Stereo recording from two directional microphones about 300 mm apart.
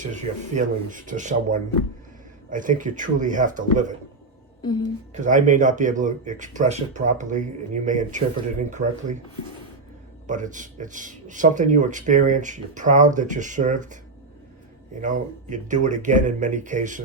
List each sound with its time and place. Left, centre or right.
0.0 s speech: right
5.1 s speech: right
10.2 s speech: right
15.0 s speech: right